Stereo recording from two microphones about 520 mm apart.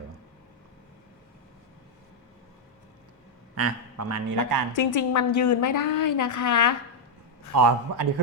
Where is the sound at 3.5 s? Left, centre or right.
Right.